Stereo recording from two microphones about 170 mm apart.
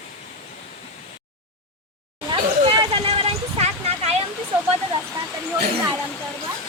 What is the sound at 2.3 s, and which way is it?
Vehicle, 30° right (ahead or behind).